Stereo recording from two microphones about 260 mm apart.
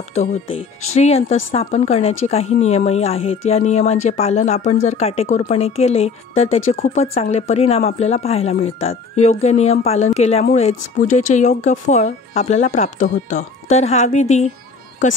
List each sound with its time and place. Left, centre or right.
0.9 s speech: left